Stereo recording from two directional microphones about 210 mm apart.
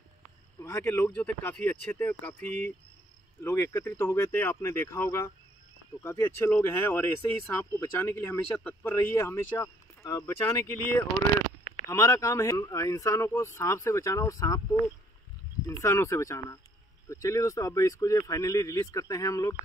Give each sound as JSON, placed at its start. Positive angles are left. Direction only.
{"t": 0.6, "sound": "speech", "side_deg": 10}